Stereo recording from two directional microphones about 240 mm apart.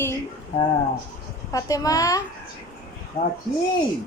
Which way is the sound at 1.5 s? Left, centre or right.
Centre.